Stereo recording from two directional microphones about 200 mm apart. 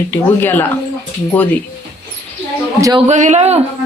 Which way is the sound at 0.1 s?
10° left (ahead or behind).